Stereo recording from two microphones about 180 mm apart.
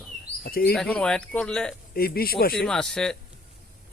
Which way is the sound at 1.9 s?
55° left (ahead or behind).